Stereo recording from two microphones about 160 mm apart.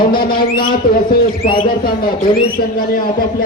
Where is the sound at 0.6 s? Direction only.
65° left (ahead or behind).